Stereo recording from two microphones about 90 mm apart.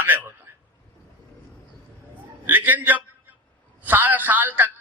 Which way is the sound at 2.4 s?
20° right (ahead or behind).